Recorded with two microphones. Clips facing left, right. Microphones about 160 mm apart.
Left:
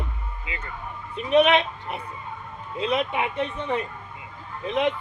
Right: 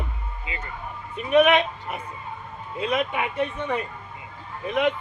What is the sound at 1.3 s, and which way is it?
Speech, 25° left (ahead or behind).